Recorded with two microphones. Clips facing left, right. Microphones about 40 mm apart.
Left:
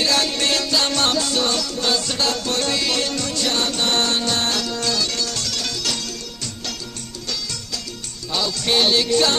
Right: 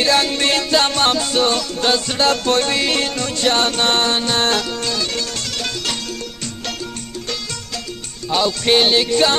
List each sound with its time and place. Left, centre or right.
0.0 s music: right
4.0 s music: right
8.3 s music: right